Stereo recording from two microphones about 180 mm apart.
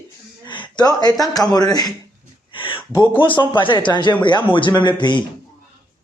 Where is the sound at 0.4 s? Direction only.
25° left (ahead or behind).